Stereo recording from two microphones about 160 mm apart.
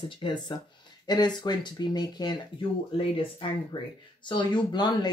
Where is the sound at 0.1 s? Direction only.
30° left (ahead or behind).